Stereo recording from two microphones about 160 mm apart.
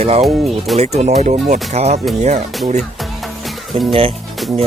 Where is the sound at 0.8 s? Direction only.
45° right (ahead or behind).